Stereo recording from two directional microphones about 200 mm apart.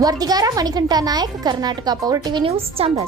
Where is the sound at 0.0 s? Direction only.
20° right (ahead or behind).